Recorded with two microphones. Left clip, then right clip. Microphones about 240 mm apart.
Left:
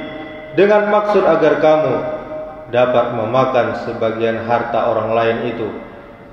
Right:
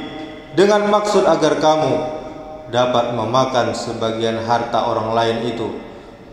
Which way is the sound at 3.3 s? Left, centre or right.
Right.